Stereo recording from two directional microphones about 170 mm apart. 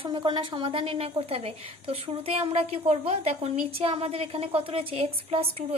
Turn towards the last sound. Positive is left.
turn(degrees=-35)  # may be behind; listen again after turning